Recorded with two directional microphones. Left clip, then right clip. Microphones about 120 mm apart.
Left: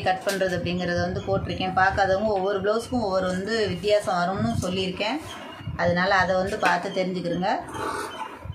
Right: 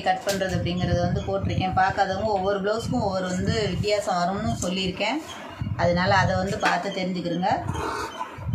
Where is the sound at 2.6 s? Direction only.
25° left (ahead or behind).